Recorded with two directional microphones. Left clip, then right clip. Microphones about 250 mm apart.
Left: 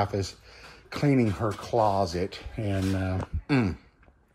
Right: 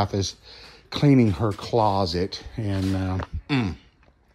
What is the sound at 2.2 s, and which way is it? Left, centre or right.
Speech, centre.